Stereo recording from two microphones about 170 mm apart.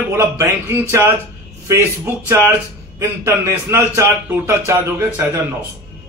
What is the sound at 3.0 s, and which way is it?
A man's voice, 15° right (ahead or behind).